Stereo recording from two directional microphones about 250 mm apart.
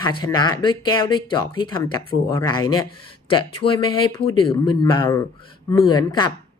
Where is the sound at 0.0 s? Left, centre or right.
Centre.